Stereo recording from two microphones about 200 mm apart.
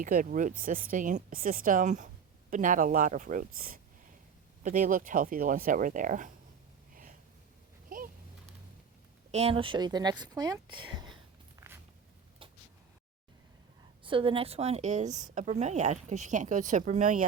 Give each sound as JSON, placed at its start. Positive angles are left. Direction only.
{"t": 0.0, "sound": "a woman's voice", "side_deg": -45}
{"t": 7.9, "sound": "a sound", "side_deg": -45}
{"t": 9.3, "sound": "speech", "side_deg": -30}
{"t": 14.0, "sound": "a woman's voice", "side_deg": -25}